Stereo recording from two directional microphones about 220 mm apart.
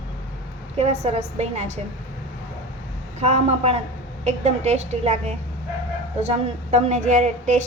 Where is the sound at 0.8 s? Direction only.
30° right (ahead or behind).